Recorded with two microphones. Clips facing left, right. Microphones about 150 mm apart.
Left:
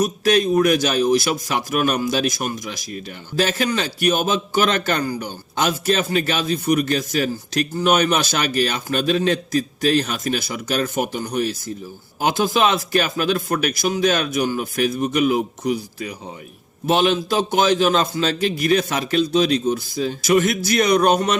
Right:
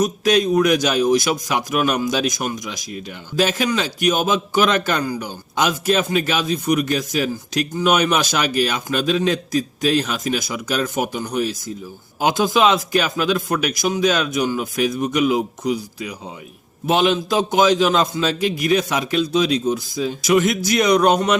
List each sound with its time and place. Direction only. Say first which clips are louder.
0.3 s a man's voice: even; 15° right (ahead or behind)
12.2 s a man's voice: right 2 dB; 15° right (ahead or behind)
15.0 s a man's voice: even; 15° right (ahead or behind)